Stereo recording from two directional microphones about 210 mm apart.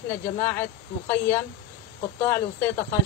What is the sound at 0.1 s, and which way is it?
A woman's voice, 10° left (ahead or behind).